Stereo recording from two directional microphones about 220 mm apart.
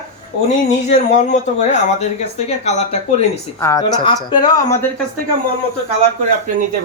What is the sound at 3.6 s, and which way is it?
Speech, 15° left (ahead or behind).